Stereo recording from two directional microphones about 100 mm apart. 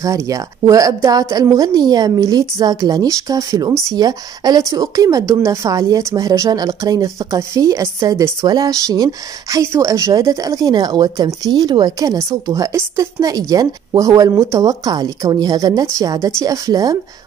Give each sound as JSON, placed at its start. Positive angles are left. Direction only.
{"t": 0.0, "sound": "speech", "side_deg": -35}
{"t": 12.2, "sound": "speech", "side_deg": -30}